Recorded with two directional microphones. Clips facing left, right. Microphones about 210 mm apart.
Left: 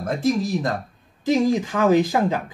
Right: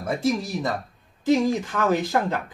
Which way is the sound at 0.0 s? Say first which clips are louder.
Left 3 dB; 5° right (ahead or behind).